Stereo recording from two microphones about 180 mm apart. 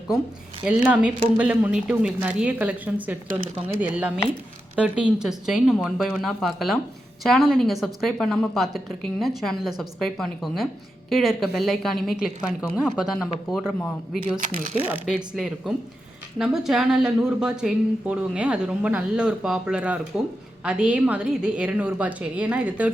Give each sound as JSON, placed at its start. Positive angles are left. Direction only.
{"t": 0.9, "sound": "a woman's voice", "side_deg": -5}
{"t": 14.4, "sound": "speech", "side_deg": -45}
{"t": 15.0, "sound": "a woman's voice", "side_deg": 0}